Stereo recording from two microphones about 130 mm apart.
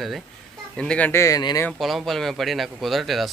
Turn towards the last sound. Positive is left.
turn(degrees=0)  # may be behind; listen again after turning